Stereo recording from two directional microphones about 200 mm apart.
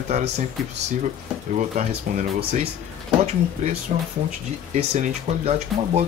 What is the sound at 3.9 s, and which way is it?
Speech, 35° right (ahead or behind).